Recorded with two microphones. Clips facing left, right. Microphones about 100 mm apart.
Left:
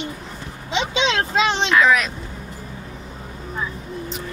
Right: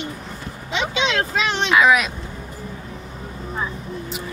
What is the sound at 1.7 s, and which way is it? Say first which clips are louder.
Speech: right 4 dB; 10° right (ahead or behind).